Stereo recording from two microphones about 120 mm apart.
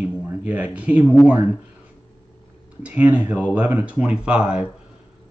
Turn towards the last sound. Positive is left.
turn(degrees=-5)  # may be behind; listen again after turning